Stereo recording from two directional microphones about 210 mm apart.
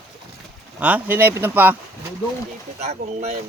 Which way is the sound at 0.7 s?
5° right (ahead or behind).